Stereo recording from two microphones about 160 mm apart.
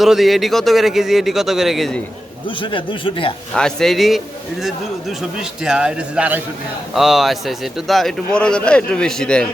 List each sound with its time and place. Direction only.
0.0 s a man's voice: centre (ahead or behind)
2.6 s speech: 30° left (ahead or behind)
3.5 s a man's voice: 5° left (ahead or behind)